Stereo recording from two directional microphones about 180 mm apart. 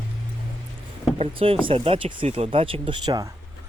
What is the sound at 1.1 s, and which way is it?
Speech, 35° right (ahead or behind).